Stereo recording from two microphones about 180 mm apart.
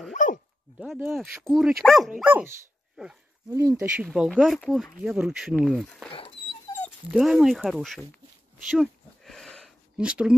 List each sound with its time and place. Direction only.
0.1 s dog: 45° left (ahead or behind)
0.7 s speech: 5° right (ahead or behind)
4.0 s speech: 5° right (ahead or behind)
6.0 s dog: 30° left (ahead or behind)
7.1 s speech: 5° right (ahead or behind)
8.6 s a sound: centre (ahead or behind)